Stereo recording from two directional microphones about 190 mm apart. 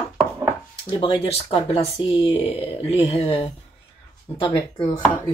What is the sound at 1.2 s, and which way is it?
Speech, 30° left (ahead or behind).